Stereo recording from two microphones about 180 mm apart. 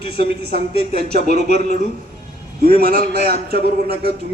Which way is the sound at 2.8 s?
60° right (ahead or behind).